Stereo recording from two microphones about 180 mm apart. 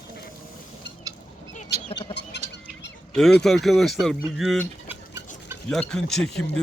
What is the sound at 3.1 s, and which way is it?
Speech, 5° left (ahead or behind).